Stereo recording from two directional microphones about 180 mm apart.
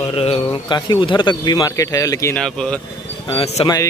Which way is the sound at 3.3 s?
35° left (ahead or behind).